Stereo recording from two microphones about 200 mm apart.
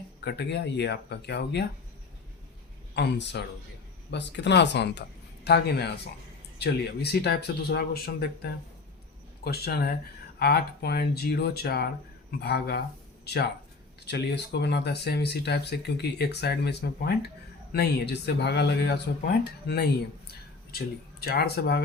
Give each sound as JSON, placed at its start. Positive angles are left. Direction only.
{"t": 0.3, "sound": "speech", "side_deg": 55}
{"t": 2.9, "sound": "speech", "side_deg": 60}